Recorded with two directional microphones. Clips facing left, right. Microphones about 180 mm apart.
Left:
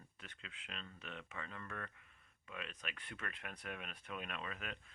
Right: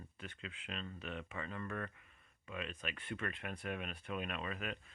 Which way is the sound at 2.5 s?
5° right (ahead or behind).